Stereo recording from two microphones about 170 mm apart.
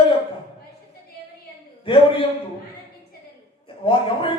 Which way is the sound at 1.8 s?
30° left (ahead or behind).